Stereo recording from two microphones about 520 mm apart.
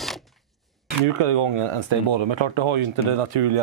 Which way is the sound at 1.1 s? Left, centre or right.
Right.